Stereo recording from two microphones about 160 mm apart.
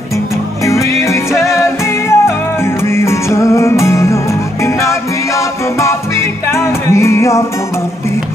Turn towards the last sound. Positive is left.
turn(degrees=20)  # may be behind; listen again after turning